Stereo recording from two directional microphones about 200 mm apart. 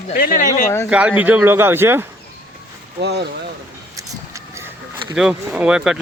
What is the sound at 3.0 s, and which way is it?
Speech, 55° right (ahead or behind).